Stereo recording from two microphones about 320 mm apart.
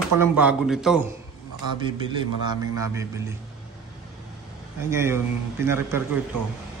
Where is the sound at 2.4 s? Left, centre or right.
Centre.